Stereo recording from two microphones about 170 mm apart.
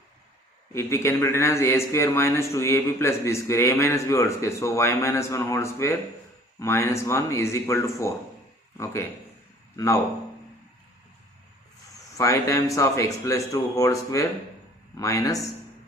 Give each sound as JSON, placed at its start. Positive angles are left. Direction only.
{"t": 0.7, "sound": "speech", "side_deg": 15}
{"t": 12.1, "sound": "speech", "side_deg": 15}